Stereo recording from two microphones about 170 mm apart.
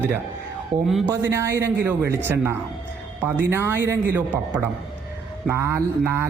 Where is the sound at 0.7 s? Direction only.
45° right (ahead or behind).